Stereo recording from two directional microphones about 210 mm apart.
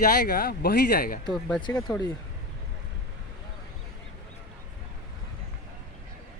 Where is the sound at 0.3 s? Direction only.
45° left (ahead or behind).